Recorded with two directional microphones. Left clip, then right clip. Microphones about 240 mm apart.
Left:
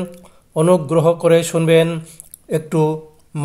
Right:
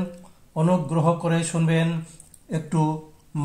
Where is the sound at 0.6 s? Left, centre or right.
Left.